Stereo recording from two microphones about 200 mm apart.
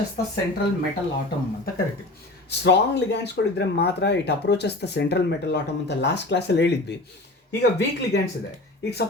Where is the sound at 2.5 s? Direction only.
60° left (ahead or behind).